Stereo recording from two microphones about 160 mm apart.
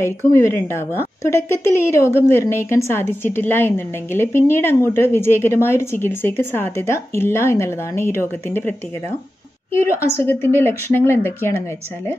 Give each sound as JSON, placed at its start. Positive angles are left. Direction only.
{"t": 0.3, "sound": "a woman's voice", "side_deg": 20}
{"t": 10.1, "sound": "a woman's voice", "side_deg": 15}